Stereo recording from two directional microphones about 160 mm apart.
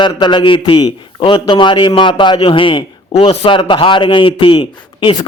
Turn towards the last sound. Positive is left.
turn(degrees=35)  # may be behind; listen again after turning